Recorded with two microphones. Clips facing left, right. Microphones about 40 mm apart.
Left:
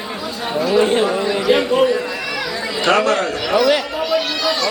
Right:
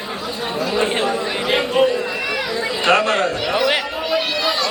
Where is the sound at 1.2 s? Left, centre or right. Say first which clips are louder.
Left 4 dB; right.